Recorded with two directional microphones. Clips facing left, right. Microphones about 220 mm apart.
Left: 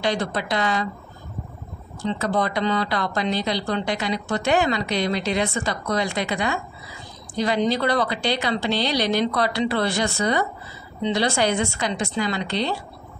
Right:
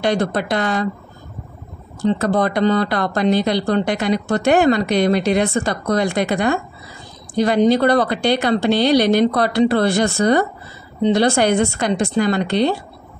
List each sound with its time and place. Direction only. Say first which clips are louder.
0.0 s speech: right 6 dB; 55° right (ahead or behind)
2.0 s speech: right 6 dB; 55° right (ahead or behind)